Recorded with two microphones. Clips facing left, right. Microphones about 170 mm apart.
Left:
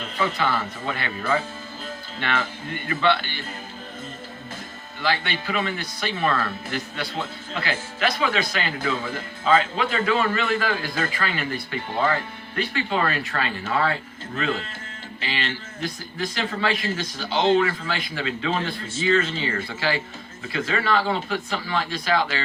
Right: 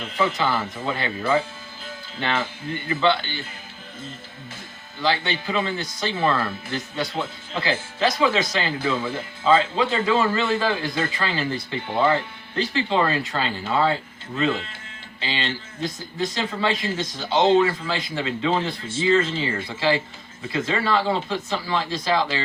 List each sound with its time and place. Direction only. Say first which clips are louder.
0.2 s speech: right 2 dB; 25° right (ahead or behind)
2.9 s speech: right 1 dB; 25° right (ahead or behind)
5.0 s speech: right 2 dB; 25° right (ahead or behind)